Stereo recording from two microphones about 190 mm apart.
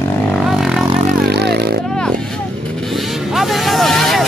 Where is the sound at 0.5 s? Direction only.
Centre (ahead or behind).